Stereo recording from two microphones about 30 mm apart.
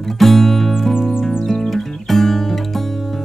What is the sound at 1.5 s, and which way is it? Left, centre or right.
Music, centre.